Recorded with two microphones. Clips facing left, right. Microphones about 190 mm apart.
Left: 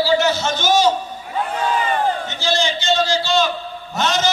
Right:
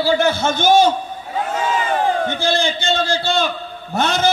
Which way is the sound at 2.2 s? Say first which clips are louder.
Right 2 dB; 55° right (ahead or behind).